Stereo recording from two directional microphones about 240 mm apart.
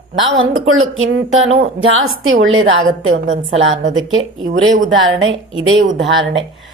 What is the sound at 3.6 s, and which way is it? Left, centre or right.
A woman's voice, right.